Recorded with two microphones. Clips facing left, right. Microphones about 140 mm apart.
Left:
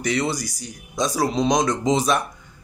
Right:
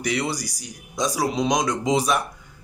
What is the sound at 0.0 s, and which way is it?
A man's voice, 10° right (ahead or behind).